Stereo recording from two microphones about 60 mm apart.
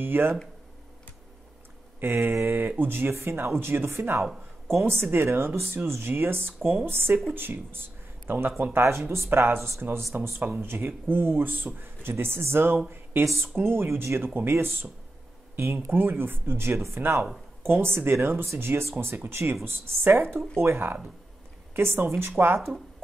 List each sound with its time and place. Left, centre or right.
0.0 s speech: right
2.0 s a sound: right
2.3 s speech: right
10.4 s speech: right